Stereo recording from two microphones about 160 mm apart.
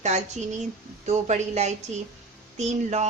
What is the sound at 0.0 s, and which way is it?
A woman's voice, 45° right (ahead or behind).